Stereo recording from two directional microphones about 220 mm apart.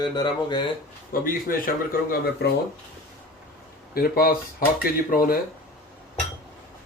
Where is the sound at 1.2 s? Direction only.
40° left (ahead or behind).